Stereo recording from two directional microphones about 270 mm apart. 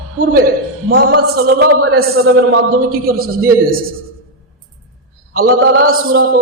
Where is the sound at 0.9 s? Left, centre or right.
Right.